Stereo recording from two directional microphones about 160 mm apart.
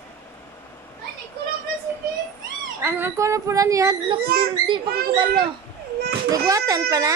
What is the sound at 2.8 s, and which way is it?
Speech, 15° right (ahead or behind).